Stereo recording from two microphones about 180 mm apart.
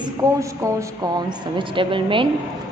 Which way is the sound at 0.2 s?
15° right (ahead or behind).